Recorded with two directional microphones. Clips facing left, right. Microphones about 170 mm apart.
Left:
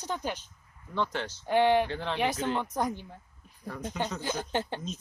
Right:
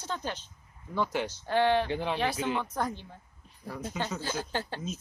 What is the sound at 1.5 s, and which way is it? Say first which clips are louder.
Speech: left 2 dB; 15° left (ahead or behind).